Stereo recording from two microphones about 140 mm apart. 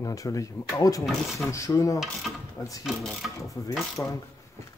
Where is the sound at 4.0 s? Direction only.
20° left (ahead or behind).